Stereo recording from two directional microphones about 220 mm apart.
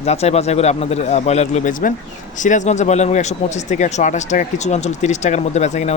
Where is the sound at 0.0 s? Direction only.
30° left (ahead or behind).